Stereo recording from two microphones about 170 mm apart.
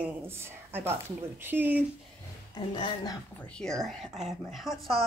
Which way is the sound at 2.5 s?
25° left (ahead or behind).